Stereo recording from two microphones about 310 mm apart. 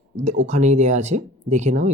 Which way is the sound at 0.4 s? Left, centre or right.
Right.